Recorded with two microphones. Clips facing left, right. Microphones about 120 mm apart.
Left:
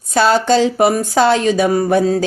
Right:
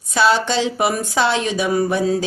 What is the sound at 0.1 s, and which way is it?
Speech, 45° left (ahead or behind).